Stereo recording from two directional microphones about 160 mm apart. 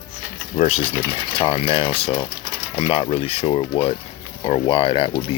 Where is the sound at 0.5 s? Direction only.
40° left (ahead or behind).